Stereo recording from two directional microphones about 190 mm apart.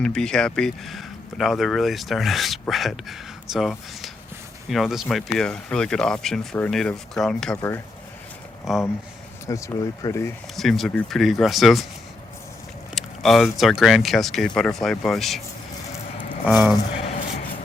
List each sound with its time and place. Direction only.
0.0 s speech: 5° left (ahead or behind)
8.7 s speech: centre (ahead or behind)
9.5 s speech: 15° left (ahead or behind)
10.6 s speech: centre (ahead or behind)
12.9 s speech: centre (ahead or behind)
16.5 s speech: 10° right (ahead or behind)
16.7 s a sound: 30° left (ahead or behind)